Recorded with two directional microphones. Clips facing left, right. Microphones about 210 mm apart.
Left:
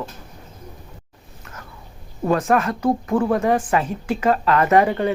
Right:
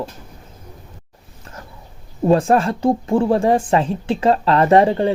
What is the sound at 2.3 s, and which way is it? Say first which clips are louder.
Speech: right 4 dB; 30° right (ahead or behind).